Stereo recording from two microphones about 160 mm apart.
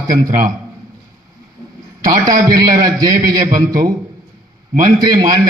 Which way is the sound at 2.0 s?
25° right (ahead or behind).